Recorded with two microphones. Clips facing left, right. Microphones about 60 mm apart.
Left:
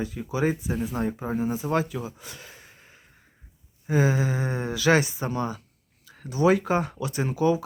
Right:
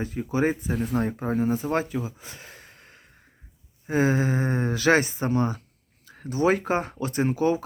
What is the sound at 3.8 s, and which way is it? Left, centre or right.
Speech, right.